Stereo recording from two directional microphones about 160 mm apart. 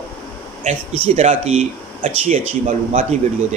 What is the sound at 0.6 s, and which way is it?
A man's voice, 45° right (ahead or behind).